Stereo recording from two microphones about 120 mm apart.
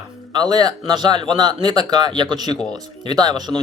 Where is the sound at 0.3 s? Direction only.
35° right (ahead or behind).